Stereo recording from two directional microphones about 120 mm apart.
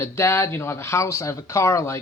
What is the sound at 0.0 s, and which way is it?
Speech, 20° left (ahead or behind).